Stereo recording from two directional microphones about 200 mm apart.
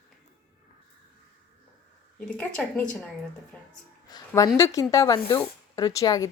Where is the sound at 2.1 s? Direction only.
5° left (ahead or behind).